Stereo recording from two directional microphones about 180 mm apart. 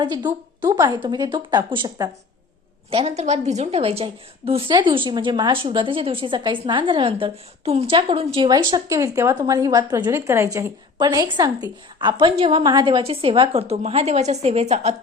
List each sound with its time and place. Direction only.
0.0 s a woman's voice: 25° right (ahead or behind)
2.9 s a woman's voice: 35° right (ahead or behind)